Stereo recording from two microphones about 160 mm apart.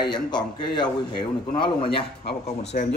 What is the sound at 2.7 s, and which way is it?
Speech, 65° left (ahead or behind).